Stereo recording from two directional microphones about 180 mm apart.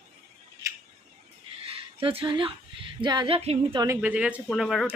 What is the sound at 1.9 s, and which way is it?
A woman's voice, 30° right (ahead or behind).